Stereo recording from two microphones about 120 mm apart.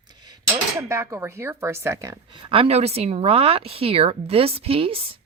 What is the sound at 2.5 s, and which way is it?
Speech, 55° right (ahead or behind).